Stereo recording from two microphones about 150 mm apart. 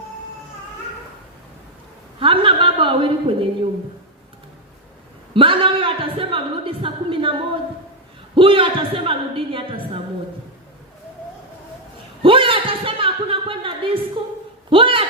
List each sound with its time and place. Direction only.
2.1 s a woman's voice: 35° right (ahead or behind)
5.3 s a woman's voice: 35° right (ahead or behind)
8.4 s a woman's voice: 35° right (ahead or behind)
12.2 s a sound: 35° right (ahead or behind)
14.7 s a woman's voice: 35° right (ahead or behind)